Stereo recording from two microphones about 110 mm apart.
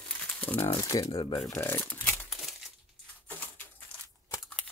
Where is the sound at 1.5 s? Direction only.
15° left (ahead or behind).